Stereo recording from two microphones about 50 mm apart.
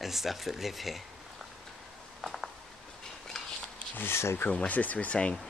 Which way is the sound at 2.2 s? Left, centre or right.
Centre.